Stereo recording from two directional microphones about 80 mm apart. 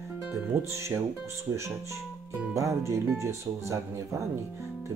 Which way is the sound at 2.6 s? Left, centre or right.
Right.